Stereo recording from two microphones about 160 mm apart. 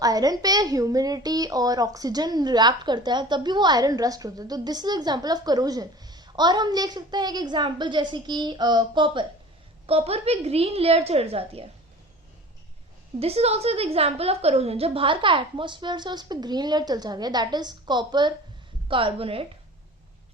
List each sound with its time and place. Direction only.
0.0 s a woman's voice: 25° right (ahead or behind)
13.1 s a woman's voice: 40° right (ahead or behind)